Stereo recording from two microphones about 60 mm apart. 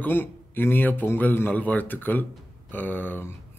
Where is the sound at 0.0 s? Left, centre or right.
Left.